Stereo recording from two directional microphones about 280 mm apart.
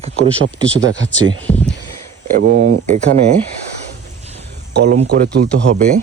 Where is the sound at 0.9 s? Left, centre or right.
Left.